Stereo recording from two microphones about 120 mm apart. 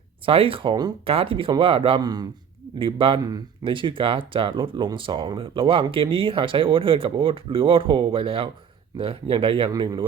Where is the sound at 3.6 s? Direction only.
45° right (ahead or behind).